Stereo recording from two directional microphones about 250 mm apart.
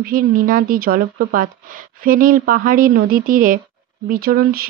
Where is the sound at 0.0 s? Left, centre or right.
Right.